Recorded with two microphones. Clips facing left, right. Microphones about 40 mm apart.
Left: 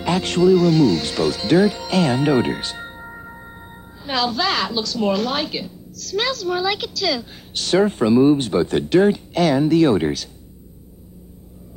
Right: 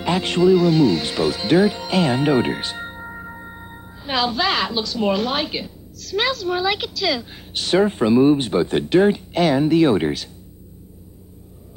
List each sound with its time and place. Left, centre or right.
0.0 s speech: centre